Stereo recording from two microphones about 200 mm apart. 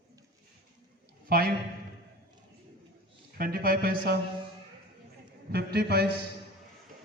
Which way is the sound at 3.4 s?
45° right (ahead or behind).